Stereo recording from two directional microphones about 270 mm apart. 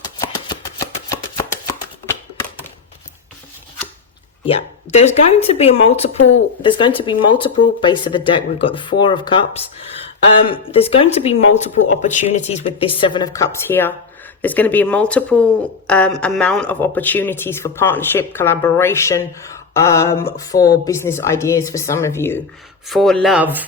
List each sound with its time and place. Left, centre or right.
0.0 s a sound: centre
4.4 s speech: left
6.1 s speech: left
6.6 s speech: centre